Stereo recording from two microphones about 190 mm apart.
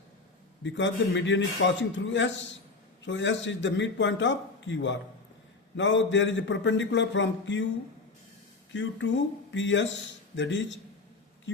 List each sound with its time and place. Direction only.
0.6 s a man's voice: 75° left (ahead or behind)
8.7 s a man's voice: 70° left (ahead or behind)